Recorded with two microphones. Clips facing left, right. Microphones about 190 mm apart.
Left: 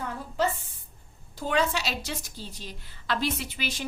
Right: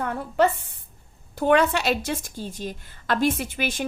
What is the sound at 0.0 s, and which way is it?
A woman's voice, 60° right (ahead or behind).